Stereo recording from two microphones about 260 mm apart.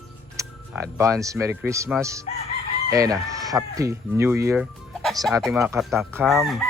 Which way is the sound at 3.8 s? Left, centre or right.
Centre.